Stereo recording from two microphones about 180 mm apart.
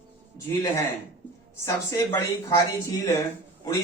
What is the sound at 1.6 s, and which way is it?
Speech, 15° left (ahead or behind).